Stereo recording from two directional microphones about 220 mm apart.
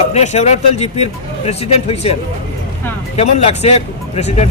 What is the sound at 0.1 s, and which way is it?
Speech, 30° left (ahead or behind).